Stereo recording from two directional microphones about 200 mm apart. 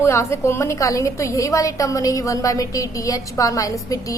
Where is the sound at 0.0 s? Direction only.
15° left (ahead or behind).